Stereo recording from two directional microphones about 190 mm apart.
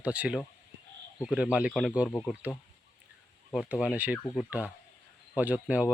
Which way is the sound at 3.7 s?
5° right (ahead or behind).